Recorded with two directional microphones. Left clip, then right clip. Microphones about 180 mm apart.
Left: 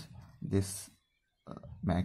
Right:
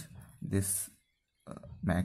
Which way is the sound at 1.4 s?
15° right (ahead or behind).